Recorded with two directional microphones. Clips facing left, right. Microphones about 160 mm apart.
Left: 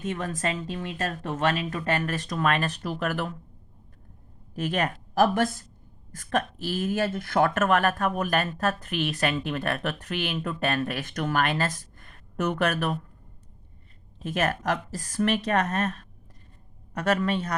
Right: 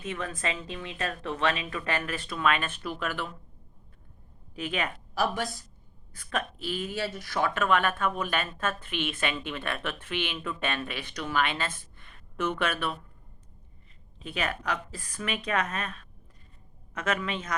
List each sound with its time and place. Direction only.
0.0 s speech: 40° left (ahead or behind)
4.5 s speech: 40° left (ahead or behind)
14.2 s speech: 45° left (ahead or behind)